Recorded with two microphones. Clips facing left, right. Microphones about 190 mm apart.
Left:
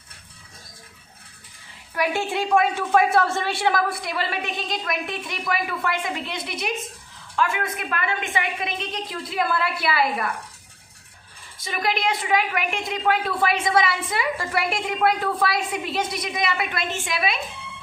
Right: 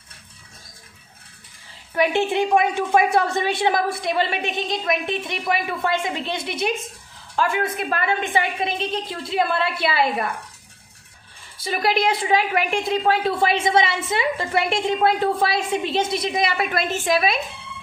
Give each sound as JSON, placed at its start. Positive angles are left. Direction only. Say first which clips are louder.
{"t": 1.9, "sound": "a woman's voice", "louder": "right 5 dB", "side_deg": -20}
{"t": 11.6, "sound": "a woman's voice", "louder": "right 4 dB", "side_deg": -35}